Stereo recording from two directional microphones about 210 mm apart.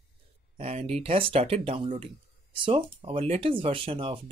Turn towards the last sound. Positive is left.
turn(degrees=-25)  # may be behind; listen again after turning